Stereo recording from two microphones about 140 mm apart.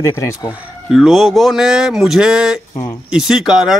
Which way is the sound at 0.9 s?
5° right (ahead or behind).